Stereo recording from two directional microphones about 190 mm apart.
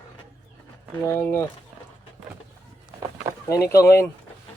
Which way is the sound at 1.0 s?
10° left (ahead or behind).